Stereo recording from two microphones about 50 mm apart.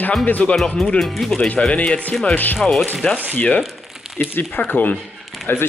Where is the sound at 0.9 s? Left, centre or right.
Centre.